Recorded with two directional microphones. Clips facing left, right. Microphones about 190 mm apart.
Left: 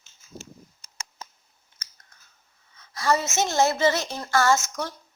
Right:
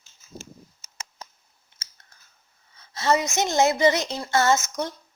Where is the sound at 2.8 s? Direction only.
25° right (ahead or behind).